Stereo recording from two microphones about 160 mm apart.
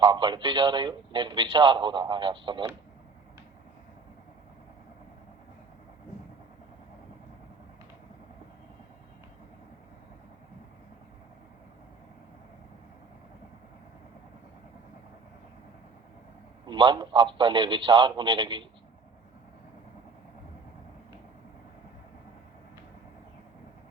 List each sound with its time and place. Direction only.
0.0 s a man's voice: 30° right (ahead or behind)
16.6 s a man's voice: 30° right (ahead or behind)